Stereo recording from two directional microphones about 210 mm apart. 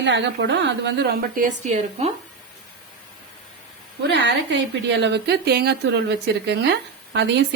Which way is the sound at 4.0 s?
55° right (ahead or behind).